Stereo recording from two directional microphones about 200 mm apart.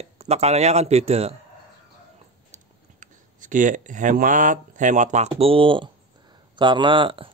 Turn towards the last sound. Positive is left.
turn(degrees=-25)  # may be behind; listen again after turning